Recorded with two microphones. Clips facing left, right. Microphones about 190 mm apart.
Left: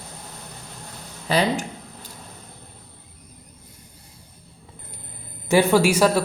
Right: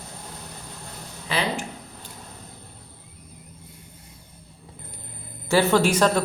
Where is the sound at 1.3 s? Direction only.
40° left (ahead or behind).